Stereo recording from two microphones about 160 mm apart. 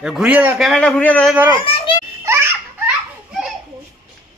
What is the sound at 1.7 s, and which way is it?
Children playing, 35° left (ahead or behind).